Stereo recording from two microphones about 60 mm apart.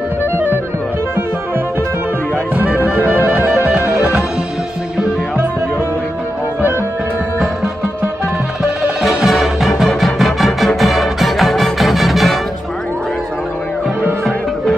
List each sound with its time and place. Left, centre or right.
0.2 s music: right
2.5 s music: right
9.0 s music: centre